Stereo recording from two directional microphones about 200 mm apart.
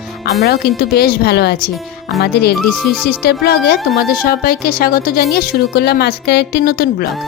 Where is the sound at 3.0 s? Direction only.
50° left (ahead or behind).